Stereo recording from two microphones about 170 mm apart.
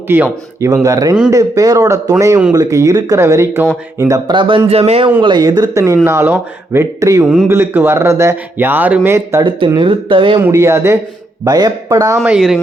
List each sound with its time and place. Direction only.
0.1 s a man's voice: 15° right (ahead or behind); by 5.1 s 35° right (ahead or behind)
5.2 s speech: 25° right (ahead or behind)
9.4 s speech: 30° right (ahead or behind)
10.4 s speech: 15° right (ahead or behind)
12.3 s speech: 5° right (ahead or behind)